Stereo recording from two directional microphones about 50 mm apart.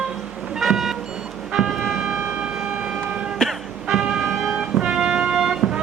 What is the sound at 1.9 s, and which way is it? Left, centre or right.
Siren, centre.